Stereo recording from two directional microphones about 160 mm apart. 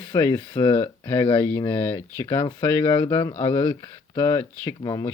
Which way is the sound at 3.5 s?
30° left (ahead or behind).